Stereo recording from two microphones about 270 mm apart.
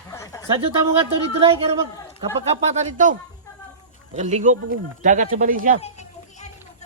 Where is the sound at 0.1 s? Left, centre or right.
Centre.